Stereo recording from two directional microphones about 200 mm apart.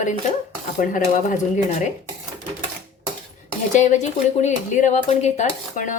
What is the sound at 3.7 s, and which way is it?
Speech, 35° left (ahead or behind).